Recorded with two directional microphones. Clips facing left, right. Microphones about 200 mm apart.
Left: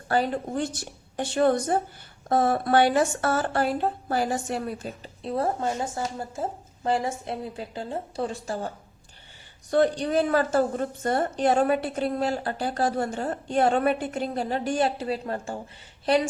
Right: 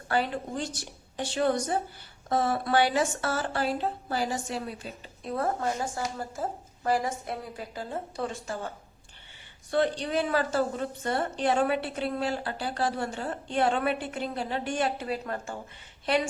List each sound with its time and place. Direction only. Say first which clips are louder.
0.1 s a woman's voice: left 4 dB; 45° left (ahead or behind)
5.2 s a woman's voice: left 3 dB; 25° left (ahead or behind)